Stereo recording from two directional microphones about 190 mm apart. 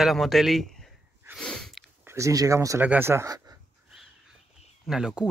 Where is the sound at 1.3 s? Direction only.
5° left (ahead or behind).